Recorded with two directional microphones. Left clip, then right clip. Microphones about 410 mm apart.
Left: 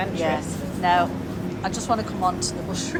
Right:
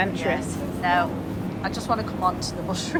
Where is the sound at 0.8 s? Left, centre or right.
Centre.